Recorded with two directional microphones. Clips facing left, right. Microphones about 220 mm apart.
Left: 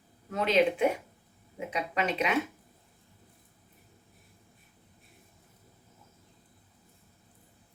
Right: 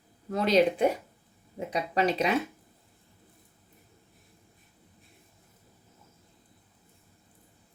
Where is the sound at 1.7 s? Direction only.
35° right (ahead or behind).